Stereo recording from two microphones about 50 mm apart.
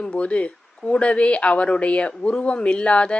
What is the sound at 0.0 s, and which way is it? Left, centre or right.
Speech, left.